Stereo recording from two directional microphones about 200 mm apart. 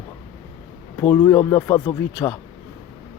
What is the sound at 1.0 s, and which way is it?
Speech, 10° left (ahead or behind).